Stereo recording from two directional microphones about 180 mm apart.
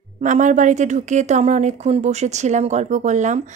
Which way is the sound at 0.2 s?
45° right (ahead or behind).